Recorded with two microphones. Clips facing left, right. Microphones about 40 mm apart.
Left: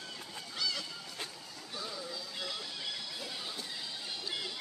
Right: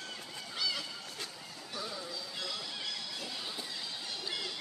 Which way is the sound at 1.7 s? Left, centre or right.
Centre.